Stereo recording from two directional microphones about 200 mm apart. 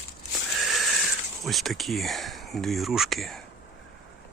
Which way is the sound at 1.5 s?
Centre (ahead or behind).